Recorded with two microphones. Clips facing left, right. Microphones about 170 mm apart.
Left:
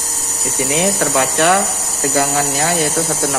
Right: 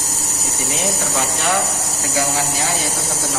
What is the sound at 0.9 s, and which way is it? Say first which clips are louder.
Speech: left 7 dB; 70° left (ahead or behind).